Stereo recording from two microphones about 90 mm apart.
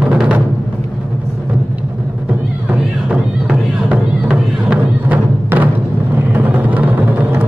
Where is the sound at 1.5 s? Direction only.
15° right (ahead or behind).